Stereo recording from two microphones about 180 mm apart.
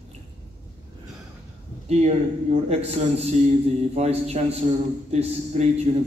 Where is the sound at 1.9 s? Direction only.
35° right (ahead or behind).